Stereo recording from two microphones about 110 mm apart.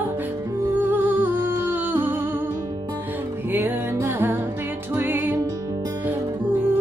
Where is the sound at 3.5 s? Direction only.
20° right (ahead or behind).